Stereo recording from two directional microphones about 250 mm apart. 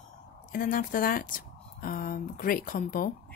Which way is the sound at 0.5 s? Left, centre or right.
Left.